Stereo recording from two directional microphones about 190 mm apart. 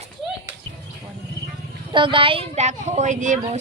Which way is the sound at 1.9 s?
25° right (ahead or behind).